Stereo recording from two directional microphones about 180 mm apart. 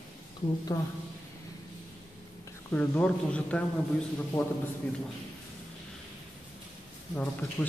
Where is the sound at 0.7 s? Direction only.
20° left (ahead or behind).